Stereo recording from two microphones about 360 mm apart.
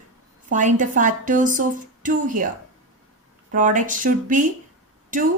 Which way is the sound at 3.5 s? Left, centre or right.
Right.